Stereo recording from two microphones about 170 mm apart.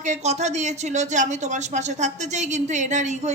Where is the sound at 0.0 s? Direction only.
40° right (ahead or behind).